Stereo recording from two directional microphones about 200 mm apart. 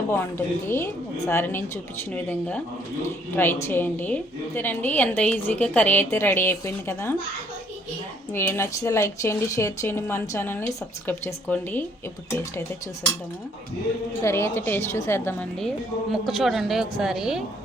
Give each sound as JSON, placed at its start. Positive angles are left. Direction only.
{"t": 0.1, "sound": "a woman's voice", "side_deg": 10}
{"t": 8.3, "sound": "a woman's voice", "side_deg": 10}
{"t": 14.2, "sound": "a woman's voice", "side_deg": 15}
{"t": 16.2, "sound": "a man's voice", "side_deg": 0}